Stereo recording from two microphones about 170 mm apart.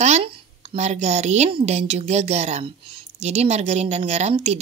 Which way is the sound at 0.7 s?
40° right (ahead or behind).